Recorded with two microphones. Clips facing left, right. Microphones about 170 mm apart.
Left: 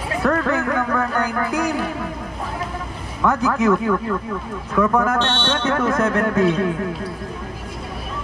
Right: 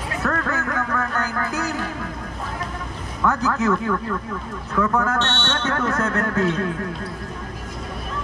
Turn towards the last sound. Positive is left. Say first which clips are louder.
# left 4 dB
turn(degrees=10)  # may be behind; listen again after turning